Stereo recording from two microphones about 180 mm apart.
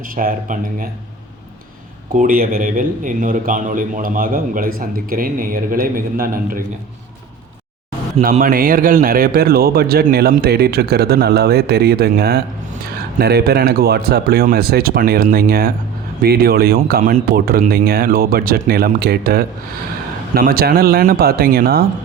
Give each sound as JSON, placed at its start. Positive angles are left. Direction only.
{"t": 0.2, "sound": "a man's voice", "side_deg": -50}
{"t": 2.1, "sound": "a man's voice", "side_deg": -50}
{"t": 8.2, "sound": "a man's voice", "side_deg": -50}